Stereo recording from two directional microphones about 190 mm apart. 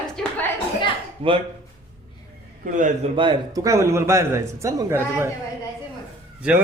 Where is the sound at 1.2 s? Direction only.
30° right (ahead or behind).